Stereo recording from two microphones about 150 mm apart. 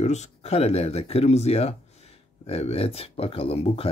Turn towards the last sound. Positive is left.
turn(degrees=40)  # may be behind; listen again after turning